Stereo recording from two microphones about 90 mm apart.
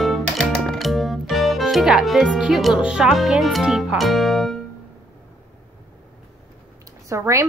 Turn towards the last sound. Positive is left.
turn(degrees=-35)  # may be behind; listen again after turning